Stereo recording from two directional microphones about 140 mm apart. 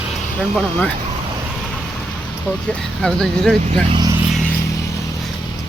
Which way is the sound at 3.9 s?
30° right (ahead or behind).